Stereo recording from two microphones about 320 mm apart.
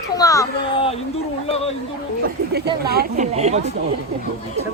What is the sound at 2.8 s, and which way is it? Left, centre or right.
Speech, right.